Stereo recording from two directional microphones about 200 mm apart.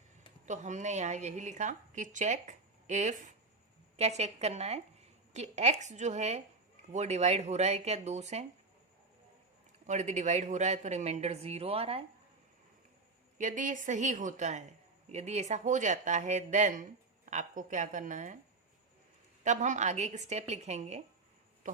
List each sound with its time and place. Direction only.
0.4 s a woman's voice: 35° right (ahead or behind)
9.8 s a woman's voice: 35° right (ahead or behind)
13.4 s a woman's voice: 40° right (ahead or behind)
19.5 s a woman's voice: 35° right (ahead or behind)